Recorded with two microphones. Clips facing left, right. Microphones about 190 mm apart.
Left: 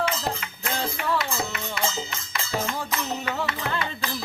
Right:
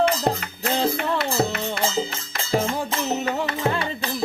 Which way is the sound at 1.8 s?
30° right (ahead or behind).